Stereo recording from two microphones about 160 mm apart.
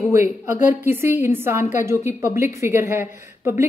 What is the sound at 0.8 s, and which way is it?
A woman's voice, 15° right (ahead or behind).